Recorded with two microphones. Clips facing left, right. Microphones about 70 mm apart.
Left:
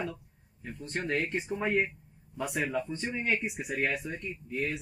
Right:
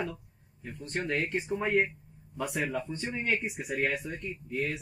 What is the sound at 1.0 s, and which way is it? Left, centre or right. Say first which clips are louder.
Speech: left 1 dB; left.